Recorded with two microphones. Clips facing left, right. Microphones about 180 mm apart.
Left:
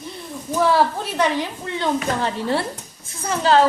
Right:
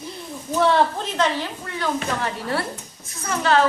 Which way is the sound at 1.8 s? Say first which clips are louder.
Left 3 dB; 25° left (ahead or behind).